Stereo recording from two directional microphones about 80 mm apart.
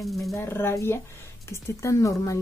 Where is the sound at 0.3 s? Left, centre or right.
Left.